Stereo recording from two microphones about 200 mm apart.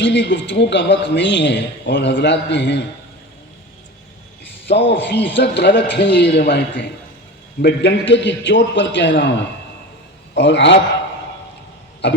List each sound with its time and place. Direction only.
0.0 s a man's voice: 60° left (ahead or behind)
4.7 s a man's voice: 60° left (ahead or behind)
10.3 s a man's voice: 60° left (ahead or behind)